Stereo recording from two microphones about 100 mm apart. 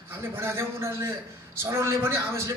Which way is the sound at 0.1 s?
25° right (ahead or behind).